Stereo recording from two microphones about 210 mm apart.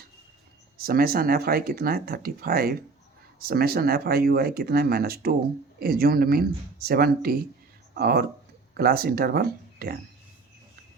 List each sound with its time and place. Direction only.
0.8 s speech: 45° right (ahead or behind)